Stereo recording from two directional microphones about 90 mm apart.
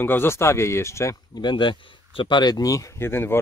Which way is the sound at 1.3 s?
60° left (ahead or behind).